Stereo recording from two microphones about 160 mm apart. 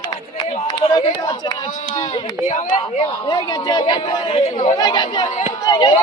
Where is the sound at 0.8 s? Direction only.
25° left (ahead or behind).